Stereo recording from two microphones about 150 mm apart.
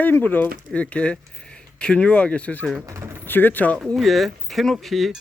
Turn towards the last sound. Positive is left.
turn(degrees=0)  # may be behind; listen again after turning